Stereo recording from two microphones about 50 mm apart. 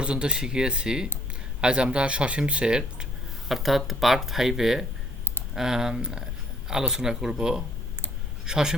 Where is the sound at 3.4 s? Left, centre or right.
Centre.